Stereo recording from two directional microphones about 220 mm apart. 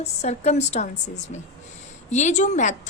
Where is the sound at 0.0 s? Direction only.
30° left (ahead or behind).